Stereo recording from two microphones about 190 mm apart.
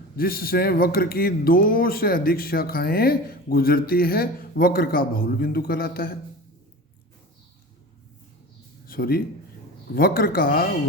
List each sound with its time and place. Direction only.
0.2 s speech: 50° left (ahead or behind)
8.9 s speech: 50° left (ahead or behind)